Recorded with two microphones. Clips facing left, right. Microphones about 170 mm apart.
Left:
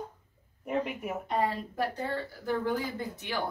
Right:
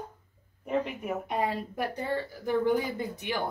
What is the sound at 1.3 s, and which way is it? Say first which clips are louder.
A woman's voice: left 2 dB; 15° right (ahead or behind).